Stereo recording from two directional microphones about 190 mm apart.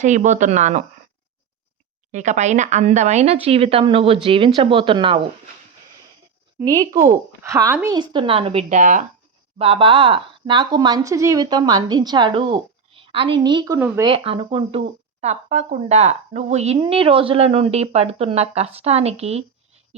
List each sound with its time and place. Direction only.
0.0 s speech: 40° right (ahead or behind)
2.1 s speech: 40° right (ahead or behind)
6.6 s speech: 20° right (ahead or behind)
7.9 s speech: 25° right (ahead or behind); by 9.0 s 40° right (ahead or behind)
9.6 s speech: 30° right (ahead or behind); by 14.1 s 10° right (ahead or behind)
14.1 s speech: 30° right (ahead or behind)